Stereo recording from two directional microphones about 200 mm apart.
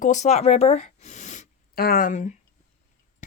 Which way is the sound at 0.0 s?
35° left (ahead or behind).